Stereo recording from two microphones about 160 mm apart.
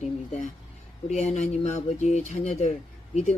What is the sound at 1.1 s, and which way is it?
Speech, 45° left (ahead or behind).